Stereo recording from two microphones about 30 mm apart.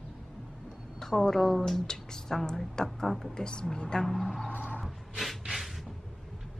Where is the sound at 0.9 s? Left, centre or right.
Centre.